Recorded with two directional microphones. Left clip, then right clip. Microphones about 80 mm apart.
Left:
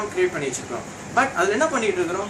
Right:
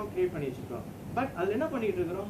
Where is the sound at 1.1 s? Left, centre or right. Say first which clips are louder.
Left 11 dB; left.